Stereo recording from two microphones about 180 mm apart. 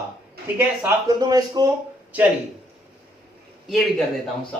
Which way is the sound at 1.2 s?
20° right (ahead or behind).